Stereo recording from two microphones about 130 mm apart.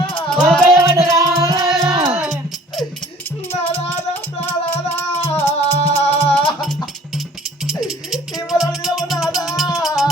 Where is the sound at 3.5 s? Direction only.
15° left (ahead or behind).